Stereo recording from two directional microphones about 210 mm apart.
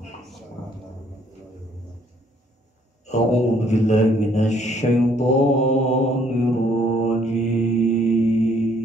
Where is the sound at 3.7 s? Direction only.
35° left (ahead or behind).